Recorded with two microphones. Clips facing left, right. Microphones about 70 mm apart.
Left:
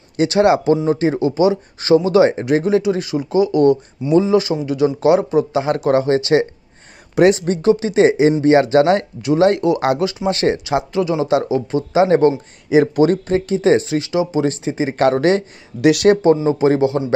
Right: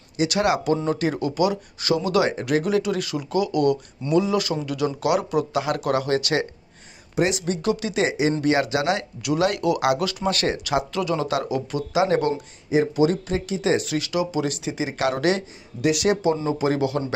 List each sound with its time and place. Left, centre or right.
0.3 s speech: left
7.3 s speech: left
12.8 s speech: left
15.8 s speech: left
16.4 s speech: left